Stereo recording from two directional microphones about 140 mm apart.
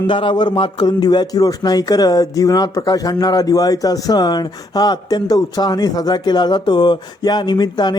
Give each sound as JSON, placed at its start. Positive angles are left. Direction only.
{"t": 0.1, "sound": "a man's voice", "side_deg": 35}